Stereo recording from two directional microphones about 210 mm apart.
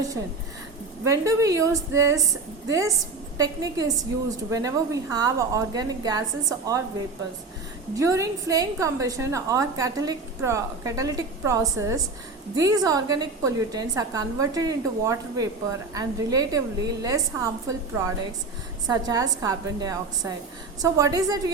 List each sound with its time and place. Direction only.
1.0 s a woman's voice: 15° right (ahead or behind)
7.9 s a woman's voice: 15° right (ahead or behind)